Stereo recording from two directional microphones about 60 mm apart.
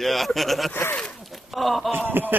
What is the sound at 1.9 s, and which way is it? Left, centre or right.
Speech, right.